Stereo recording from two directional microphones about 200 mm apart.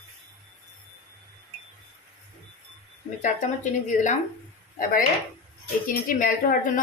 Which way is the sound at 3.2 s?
40° left (ahead or behind).